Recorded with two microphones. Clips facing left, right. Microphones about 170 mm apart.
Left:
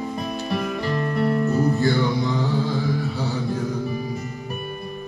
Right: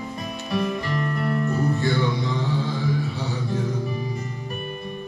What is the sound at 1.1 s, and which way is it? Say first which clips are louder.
Music: left 5 dB; 20° left (ahead or behind).